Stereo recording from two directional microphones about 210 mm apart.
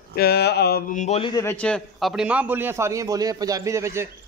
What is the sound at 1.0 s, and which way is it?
Speech, 30° left (ahead or behind).